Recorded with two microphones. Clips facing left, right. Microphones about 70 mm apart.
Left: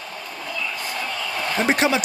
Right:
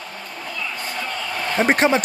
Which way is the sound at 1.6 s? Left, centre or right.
Right.